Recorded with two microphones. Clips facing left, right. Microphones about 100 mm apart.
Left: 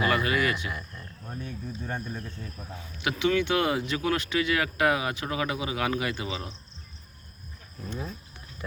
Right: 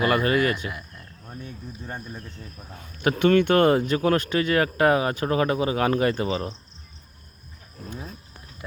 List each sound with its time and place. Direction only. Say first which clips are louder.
0.0 s speech: right 4 dB; 40° right (ahead or behind)
2.7 s speech: right 7 dB; 50° right (ahead or behind)